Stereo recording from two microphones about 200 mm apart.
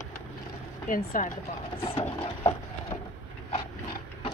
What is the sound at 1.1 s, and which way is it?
Speech, 45° left (ahead or behind).